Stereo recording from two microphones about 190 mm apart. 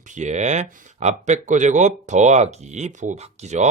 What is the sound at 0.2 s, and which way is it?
Speech, 40° right (ahead or behind).